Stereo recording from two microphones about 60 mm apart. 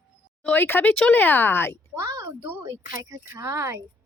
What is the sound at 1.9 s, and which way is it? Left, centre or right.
Speech, right.